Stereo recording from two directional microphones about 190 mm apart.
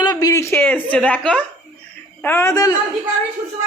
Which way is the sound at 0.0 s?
20° left (ahead or behind).